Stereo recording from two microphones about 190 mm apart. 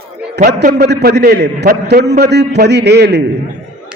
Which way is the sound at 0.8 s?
60° right (ahead or behind).